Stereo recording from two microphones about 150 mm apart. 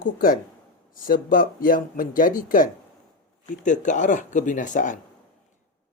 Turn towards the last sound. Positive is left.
turn(degrees=55)  # may be behind; listen again after turning